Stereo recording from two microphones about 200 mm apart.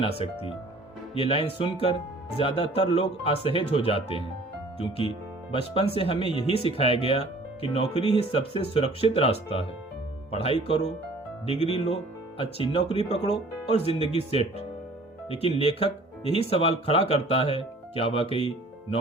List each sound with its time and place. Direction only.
1.1 s speech: 30° left (ahead or behind)